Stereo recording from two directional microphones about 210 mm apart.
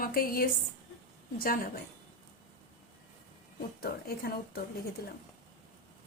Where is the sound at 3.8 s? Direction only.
45° left (ahead or behind).